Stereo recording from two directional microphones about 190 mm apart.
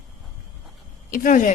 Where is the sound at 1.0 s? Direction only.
45° left (ahead or behind).